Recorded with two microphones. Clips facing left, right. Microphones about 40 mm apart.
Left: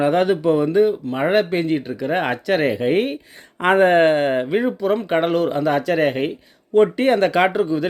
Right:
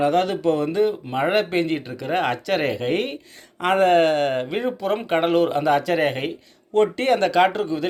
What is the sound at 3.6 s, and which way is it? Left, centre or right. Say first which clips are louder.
Speech: left 3 dB; left.